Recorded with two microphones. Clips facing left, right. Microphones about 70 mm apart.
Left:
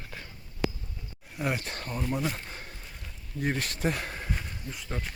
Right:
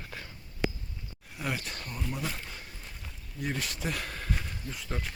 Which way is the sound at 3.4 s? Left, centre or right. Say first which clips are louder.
Left 4 dB; left.